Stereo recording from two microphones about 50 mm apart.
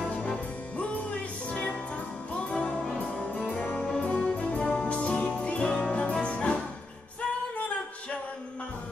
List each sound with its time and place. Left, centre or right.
0.7 s music: left